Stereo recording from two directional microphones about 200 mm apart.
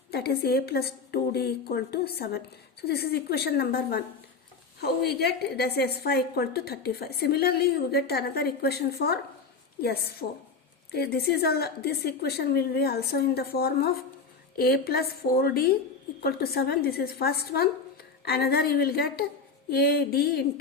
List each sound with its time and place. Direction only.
0.1 s a woman's voice: 50° left (ahead or behind)